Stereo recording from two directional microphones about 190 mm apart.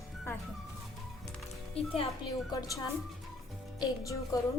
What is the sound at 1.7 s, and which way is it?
A woman's voice, 30° left (ahead or behind).